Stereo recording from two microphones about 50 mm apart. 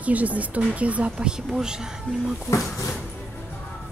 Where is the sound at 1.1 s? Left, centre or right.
Centre.